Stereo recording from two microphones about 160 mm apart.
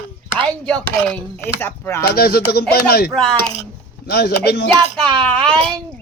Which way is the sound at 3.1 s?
5° left (ahead or behind).